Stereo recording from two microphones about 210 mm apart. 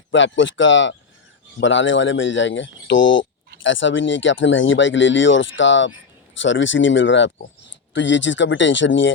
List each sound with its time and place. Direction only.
0.1 s speech: 60° left (ahead or behind)